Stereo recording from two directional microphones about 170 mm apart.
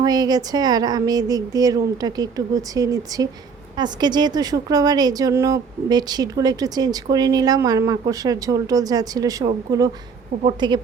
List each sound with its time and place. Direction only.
0.0 s speech: 20° right (ahead or behind)